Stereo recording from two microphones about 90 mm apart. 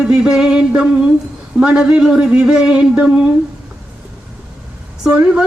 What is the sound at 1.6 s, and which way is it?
A woman's voice, 10° right (ahead or behind).